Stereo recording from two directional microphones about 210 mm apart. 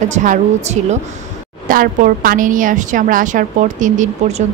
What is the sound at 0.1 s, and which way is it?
Speech, 35° right (ahead or behind).